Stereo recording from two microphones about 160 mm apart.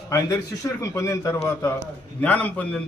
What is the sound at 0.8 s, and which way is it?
Speech, 20° left (ahead or behind).